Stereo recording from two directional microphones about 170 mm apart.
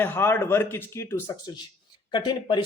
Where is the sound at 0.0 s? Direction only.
15° left (ahead or behind).